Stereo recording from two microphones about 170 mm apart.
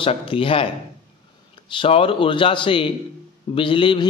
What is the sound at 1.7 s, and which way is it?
A man's voice, 30° left (ahead or behind).